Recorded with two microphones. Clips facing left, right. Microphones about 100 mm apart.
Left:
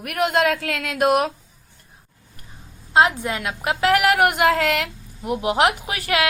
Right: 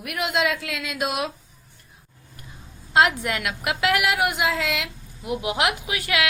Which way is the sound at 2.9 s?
30° left (ahead or behind).